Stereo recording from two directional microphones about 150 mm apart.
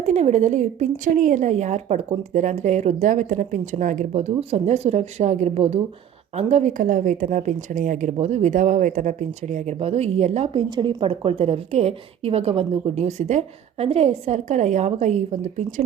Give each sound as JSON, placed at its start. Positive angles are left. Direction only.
{"t": 0.0, "sound": "a woman's voice", "side_deg": -50}